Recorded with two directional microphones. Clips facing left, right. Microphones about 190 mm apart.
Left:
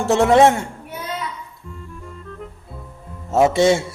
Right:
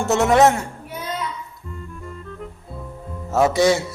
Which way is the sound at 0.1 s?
30° left (ahead or behind).